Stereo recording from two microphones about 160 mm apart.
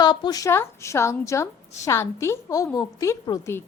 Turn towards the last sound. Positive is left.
turn(degrees=15)  # may be behind; listen again after turning